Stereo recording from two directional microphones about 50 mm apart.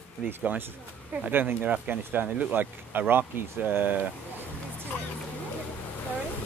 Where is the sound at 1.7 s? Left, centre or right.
Right.